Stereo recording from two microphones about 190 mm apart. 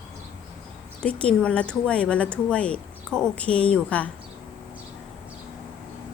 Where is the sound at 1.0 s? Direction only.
5° left (ahead or behind).